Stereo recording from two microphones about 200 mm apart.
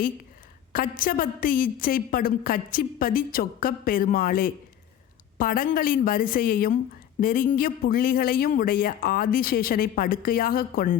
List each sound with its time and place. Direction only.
0.7 s a woman's voice: 45° left (ahead or behind)